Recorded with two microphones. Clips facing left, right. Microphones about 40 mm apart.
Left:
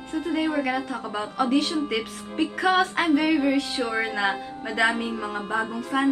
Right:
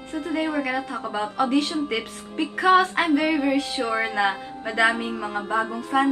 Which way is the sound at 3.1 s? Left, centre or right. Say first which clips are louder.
Left 2 dB; centre.